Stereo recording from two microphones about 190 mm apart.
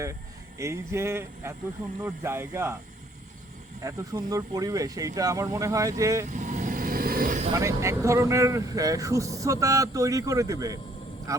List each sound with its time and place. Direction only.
0.6 s speech: 15° right (ahead or behind)
3.8 s speech: 20° right (ahead or behind)
6.2 s vehicle: 40° right (ahead or behind)
7.5 s speech: 15° right (ahead or behind)